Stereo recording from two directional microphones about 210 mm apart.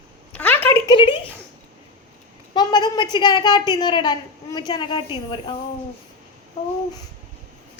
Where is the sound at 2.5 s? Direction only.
20° left (ahead or behind).